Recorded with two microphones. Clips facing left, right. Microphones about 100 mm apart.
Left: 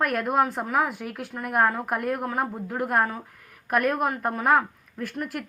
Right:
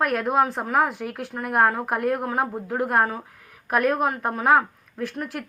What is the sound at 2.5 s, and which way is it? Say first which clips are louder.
A woman's voice: right 2 dB; 15° right (ahead or behind).